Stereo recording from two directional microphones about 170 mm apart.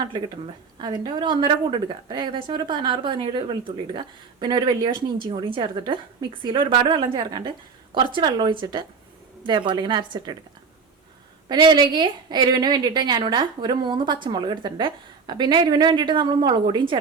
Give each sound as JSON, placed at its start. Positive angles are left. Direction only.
{"t": 0.8, "sound": "a woman's voice", "side_deg": -25}
{"t": 11.4, "sound": "a woman's voice", "side_deg": -25}